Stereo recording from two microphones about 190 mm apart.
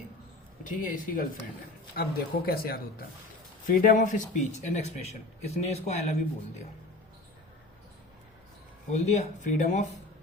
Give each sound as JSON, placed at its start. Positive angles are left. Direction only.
{"t": 0.6, "sound": "speech", "side_deg": 45}
{"t": 8.9, "sound": "speech", "side_deg": 40}